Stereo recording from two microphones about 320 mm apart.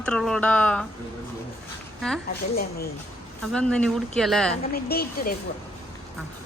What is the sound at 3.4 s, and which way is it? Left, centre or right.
A woman's voice, centre.